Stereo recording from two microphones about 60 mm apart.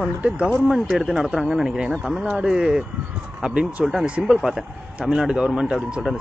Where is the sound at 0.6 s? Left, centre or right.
Centre.